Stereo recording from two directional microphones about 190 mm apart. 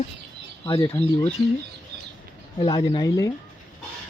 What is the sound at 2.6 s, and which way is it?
Speech, 25° left (ahead or behind).